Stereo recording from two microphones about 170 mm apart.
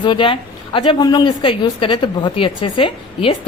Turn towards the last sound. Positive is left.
turn(degrees=30)  # may be behind; listen again after turning